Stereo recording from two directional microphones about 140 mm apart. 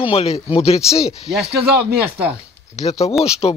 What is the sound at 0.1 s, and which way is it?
Speech, 45° left (ahead or behind).